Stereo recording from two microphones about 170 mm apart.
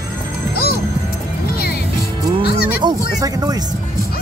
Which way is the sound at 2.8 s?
20° right (ahead or behind).